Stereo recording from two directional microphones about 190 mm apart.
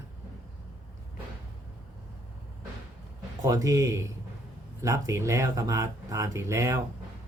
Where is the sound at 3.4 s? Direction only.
20° right (ahead or behind).